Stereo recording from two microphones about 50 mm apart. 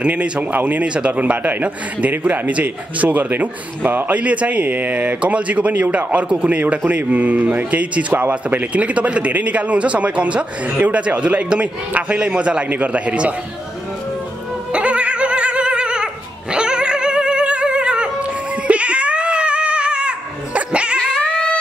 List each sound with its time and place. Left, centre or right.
0.0 s speech: right
0.8 s speech: right
4.2 s speech: right
14.7 s a sound: right